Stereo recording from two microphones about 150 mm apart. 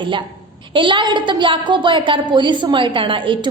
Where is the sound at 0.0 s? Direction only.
30° right (ahead or behind).